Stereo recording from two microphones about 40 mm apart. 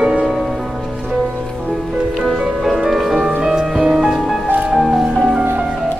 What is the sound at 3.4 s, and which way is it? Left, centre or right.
Music, centre.